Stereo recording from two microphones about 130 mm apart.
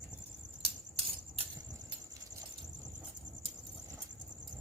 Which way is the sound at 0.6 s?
50° right (ahead or behind).